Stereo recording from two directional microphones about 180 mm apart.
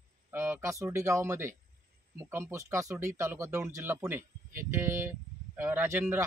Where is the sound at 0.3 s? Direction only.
10° right (ahead or behind).